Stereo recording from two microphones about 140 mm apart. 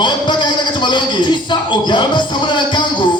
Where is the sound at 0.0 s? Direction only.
35° left (ahead or behind).